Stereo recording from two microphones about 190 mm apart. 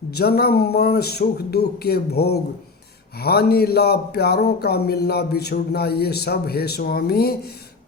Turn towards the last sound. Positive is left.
turn(degrees=55)  # may be behind; listen again after turning